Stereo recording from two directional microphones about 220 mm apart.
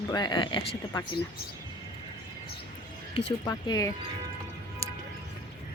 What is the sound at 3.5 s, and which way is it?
Speech, 15° left (ahead or behind).